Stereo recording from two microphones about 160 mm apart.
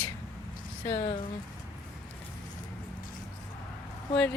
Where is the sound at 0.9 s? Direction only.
35° left (ahead or behind).